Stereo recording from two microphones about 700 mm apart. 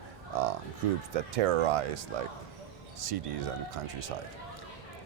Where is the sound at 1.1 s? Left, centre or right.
Right.